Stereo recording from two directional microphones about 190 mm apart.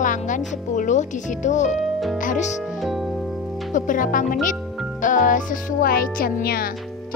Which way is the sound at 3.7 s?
45° left (ahead or behind).